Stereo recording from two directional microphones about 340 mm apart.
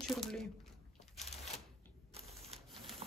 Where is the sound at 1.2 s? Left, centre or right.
Centre.